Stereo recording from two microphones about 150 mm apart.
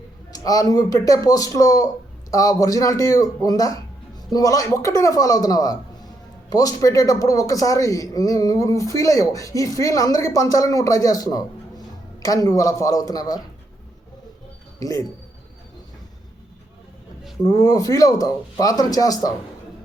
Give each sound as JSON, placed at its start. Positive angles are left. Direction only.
{"t": 0.3, "sound": "a man's voice", "side_deg": 25}
{"t": 14.8, "sound": "speech", "side_deg": 25}
{"t": 17.4, "sound": "a man's voice", "side_deg": 25}